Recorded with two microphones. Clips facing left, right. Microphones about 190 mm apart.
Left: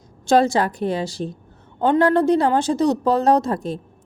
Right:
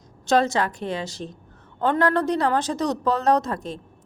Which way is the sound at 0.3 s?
30° left (ahead or behind).